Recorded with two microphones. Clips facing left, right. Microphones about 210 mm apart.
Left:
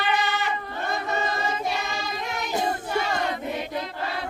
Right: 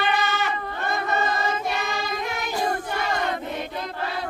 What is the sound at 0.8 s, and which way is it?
Choir, 60° right (ahead or behind).